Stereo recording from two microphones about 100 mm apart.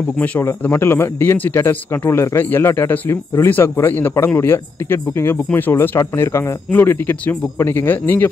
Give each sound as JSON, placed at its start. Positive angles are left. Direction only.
{"t": 0.2, "sound": "speech", "side_deg": 20}